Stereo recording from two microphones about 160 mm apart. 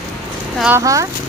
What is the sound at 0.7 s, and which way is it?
Speech, 20° right (ahead or behind).